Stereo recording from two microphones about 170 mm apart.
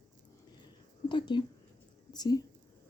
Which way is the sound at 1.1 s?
25° left (ahead or behind).